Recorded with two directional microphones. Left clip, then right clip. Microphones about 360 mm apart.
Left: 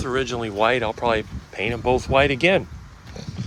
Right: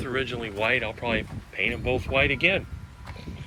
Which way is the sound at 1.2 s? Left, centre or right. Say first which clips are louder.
Left 1 dB; left.